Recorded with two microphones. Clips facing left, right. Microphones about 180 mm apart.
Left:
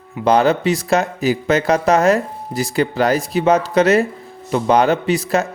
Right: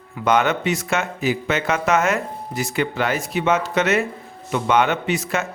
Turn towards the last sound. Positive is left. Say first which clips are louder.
# left 6 dB
turn(degrees=35)  # may be behind; listen again after turning